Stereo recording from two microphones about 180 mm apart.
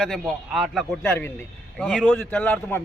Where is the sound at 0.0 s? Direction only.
Centre (ahead or behind).